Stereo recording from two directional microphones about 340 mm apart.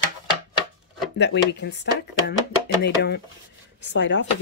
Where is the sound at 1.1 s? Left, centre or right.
Left.